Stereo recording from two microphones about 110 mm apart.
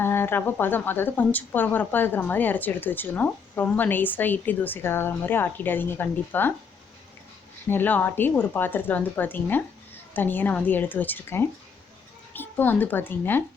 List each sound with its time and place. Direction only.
0.0 s speech: 20° left (ahead or behind)
7.7 s a woman's voice: 15° left (ahead or behind)